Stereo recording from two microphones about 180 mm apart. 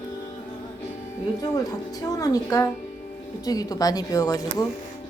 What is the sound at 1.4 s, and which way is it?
A woman's voice, 20° left (ahead or behind).